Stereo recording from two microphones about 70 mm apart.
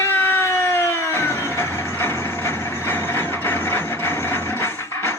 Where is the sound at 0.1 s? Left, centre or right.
Left.